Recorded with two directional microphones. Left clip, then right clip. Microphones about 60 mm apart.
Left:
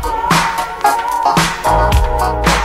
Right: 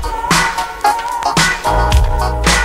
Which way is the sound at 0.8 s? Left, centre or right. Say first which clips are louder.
Left 2 dB; left.